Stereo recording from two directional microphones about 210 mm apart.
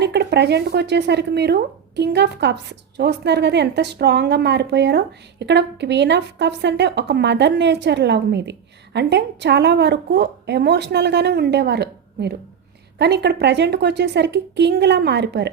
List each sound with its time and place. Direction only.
0.0 s a woman's voice: 55° right (ahead or behind)